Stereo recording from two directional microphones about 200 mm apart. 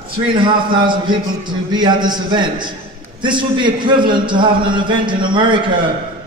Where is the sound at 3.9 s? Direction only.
25° right (ahead or behind).